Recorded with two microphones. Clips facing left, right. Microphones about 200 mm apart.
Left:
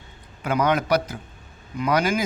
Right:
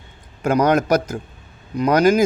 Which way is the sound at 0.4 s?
40° right (ahead or behind).